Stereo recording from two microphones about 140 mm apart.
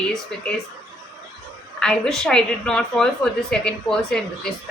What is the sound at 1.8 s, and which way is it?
A woman's voice, 5° left (ahead or behind).